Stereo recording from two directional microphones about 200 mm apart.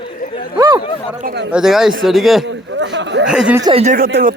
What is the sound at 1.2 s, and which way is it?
Speech, 60° right (ahead or behind).